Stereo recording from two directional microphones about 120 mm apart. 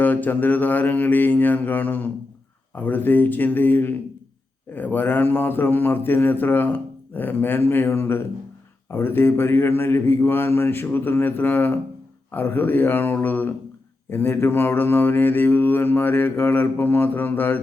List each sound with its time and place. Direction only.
0.0 s a man's voice: 15° left (ahead or behind)